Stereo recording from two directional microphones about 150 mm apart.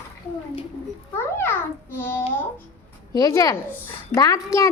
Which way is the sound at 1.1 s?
15° left (ahead or behind).